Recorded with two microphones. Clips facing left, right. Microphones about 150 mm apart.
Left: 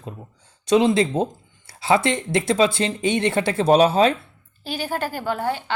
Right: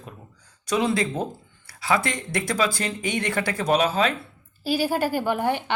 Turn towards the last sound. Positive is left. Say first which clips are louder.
# right 1 dB
turn(degrees=-15)  # may be behind; listen again after turning